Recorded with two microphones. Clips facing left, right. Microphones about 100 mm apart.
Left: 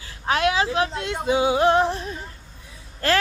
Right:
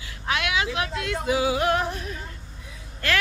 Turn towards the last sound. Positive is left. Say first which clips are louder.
# left 4 dB
turn(degrees=35)  # may be behind; listen again after turning